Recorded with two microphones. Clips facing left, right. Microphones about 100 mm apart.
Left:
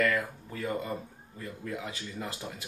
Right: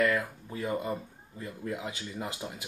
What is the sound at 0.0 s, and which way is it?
Speech, 20° right (ahead or behind).